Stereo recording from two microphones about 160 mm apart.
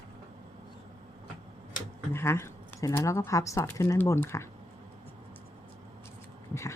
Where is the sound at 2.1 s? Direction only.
15° left (ahead or behind).